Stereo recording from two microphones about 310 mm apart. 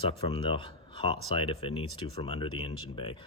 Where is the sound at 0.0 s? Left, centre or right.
Centre.